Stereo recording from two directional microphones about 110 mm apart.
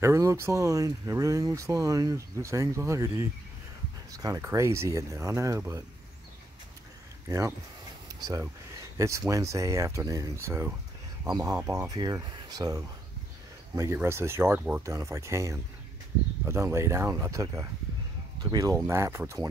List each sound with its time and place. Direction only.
0.0 s speech: 25° right (ahead or behind)
7.2 s speech: 25° right (ahead or behind)
11.5 s speech: 25° right (ahead or behind)
11.9 s speech: 40° right (ahead or behind)